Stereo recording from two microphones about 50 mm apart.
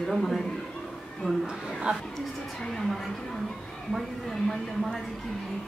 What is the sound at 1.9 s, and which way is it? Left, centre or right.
Speech, right.